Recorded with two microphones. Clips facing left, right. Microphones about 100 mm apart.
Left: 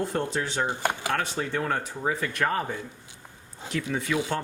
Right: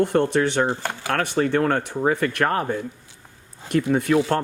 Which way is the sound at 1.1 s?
65° right (ahead or behind).